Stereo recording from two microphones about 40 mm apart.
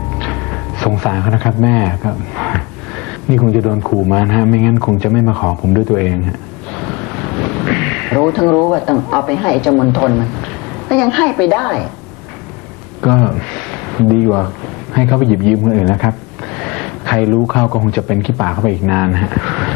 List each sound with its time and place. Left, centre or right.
0.2 s music: centre
0.9 s speech: centre
6.7 s wind: centre
8.5 s speech: centre
13.0 s speech: centre